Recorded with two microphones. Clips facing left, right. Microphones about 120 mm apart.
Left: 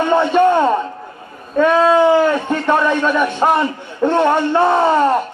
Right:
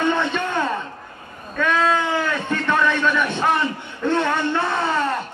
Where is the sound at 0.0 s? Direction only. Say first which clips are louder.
Left 9 dB; 35° left (ahead or behind).